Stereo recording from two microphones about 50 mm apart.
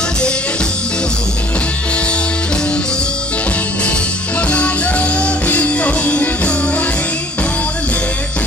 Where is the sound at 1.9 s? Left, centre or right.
Left.